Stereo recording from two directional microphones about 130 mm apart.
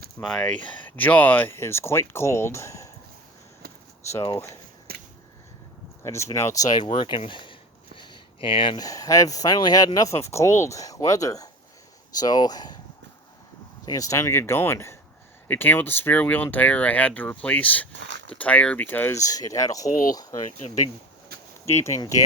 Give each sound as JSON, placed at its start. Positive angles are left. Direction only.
{"t": 0.2, "sound": "speech", "side_deg": 5}
{"t": 4.1, "sound": "speech", "side_deg": 25}
{"t": 6.0, "sound": "speech", "side_deg": 20}
{"t": 7.9, "sound": "a sound", "side_deg": 45}
{"t": 8.8, "sound": "speech", "side_deg": 25}
{"t": 13.8, "sound": "speech", "side_deg": 25}
{"t": 19.9, "sound": "speech", "side_deg": 90}
{"t": 21.7, "sound": "speech", "side_deg": 20}